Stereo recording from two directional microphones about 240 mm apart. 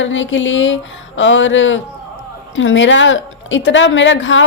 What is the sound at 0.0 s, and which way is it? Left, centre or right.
A woman's voice, left.